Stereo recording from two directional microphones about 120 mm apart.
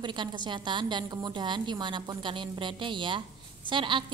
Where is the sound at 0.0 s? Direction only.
40° right (ahead or behind).